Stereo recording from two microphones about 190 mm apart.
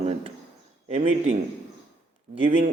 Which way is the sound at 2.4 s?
35° right (ahead or behind).